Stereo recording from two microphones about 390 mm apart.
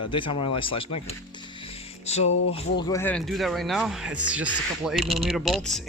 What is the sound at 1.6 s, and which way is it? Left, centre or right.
Music, centre.